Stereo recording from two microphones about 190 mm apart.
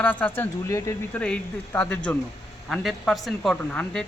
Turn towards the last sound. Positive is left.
turn(degrees=5)  # may be behind; listen again after turning